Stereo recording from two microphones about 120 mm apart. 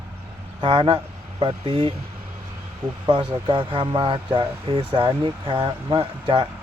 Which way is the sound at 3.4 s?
45° right (ahead or behind).